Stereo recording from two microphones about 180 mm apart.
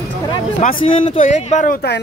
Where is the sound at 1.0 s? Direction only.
40° left (ahead or behind); by 2.0 s 60° left (ahead or behind).